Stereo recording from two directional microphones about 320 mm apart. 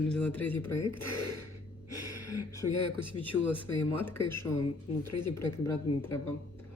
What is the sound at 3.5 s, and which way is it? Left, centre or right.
Speech, centre.